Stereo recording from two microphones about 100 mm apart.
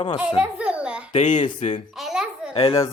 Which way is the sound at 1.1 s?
60° left (ahead or behind).